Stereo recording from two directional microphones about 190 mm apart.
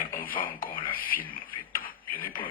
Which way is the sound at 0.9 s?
50° left (ahead or behind).